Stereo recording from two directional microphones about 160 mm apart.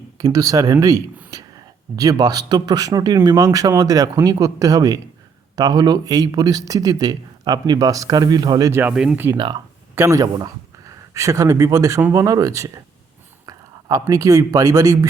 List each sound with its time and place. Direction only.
0.2 s speech: 20° right (ahead or behind)
8.8 s speech: 5° right (ahead or behind)
9.9 s speech: 15° right (ahead or behind)